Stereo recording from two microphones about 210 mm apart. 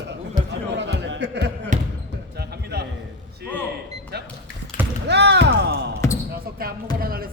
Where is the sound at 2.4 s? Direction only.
50° right (ahead or behind).